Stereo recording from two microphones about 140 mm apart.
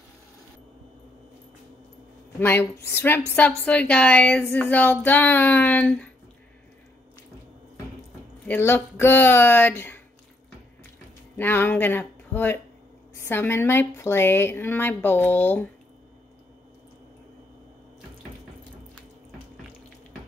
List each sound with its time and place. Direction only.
2.4 s a woman's voice: 15° left (ahead or behind)
8.5 s a woman's voice: 15° left (ahead or behind)
11.3 s a woman's voice: 15° left (ahead or behind)